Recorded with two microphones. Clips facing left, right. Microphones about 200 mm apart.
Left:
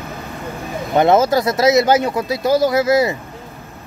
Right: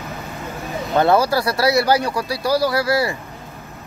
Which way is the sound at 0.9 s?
20° left (ahead or behind).